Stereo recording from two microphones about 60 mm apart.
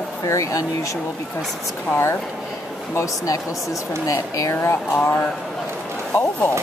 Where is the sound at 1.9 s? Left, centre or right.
Left.